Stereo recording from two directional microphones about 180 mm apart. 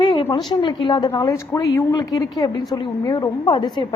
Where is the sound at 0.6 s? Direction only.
25° left (ahead or behind).